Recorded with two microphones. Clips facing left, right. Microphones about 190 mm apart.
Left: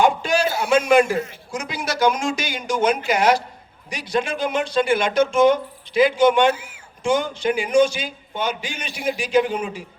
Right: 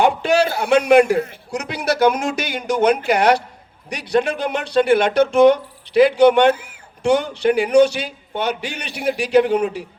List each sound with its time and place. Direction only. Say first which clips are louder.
0.0 s a man's voice: right 3 dB; 65° right (ahead or behind)